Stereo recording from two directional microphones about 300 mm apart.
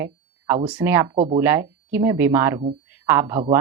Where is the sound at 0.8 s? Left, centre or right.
Centre.